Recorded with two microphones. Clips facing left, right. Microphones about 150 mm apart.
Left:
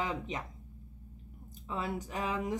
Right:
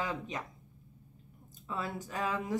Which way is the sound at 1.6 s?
20° left (ahead or behind).